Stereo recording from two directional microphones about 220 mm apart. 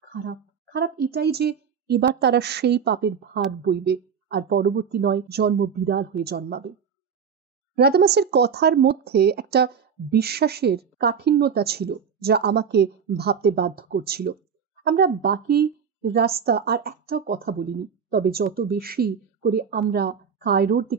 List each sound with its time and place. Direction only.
0.1 s speech: 50° right (ahead or behind)
7.7 s a woman's voice: 45° right (ahead or behind)